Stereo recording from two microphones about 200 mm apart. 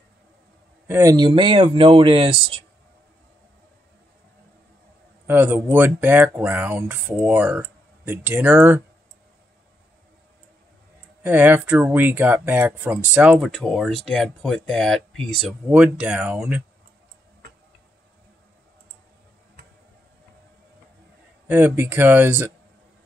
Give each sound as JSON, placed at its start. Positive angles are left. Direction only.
{"t": 0.8, "sound": "speech", "side_deg": -15}
{"t": 5.2, "sound": "speech", "side_deg": -10}
{"t": 11.2, "sound": "speech", "side_deg": -10}
{"t": 21.5, "sound": "speech", "side_deg": -10}